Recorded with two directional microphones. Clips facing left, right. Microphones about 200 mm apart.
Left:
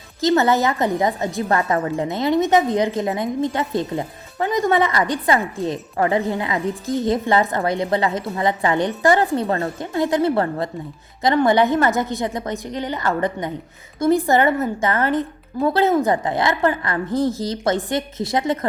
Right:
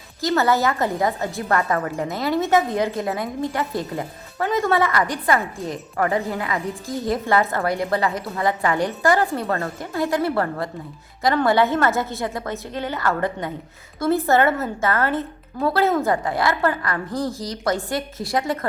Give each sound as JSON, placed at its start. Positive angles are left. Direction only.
{"t": 0.2, "sound": "a woman's voice", "side_deg": 20}